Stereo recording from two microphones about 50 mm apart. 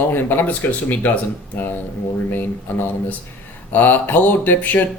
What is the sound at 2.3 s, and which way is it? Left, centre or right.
Speech, left.